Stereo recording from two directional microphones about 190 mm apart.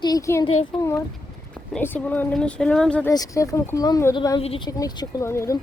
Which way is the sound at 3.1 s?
20° left (ahead or behind).